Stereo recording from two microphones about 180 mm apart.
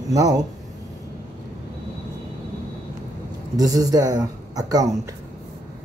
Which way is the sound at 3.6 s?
20° right (ahead or behind).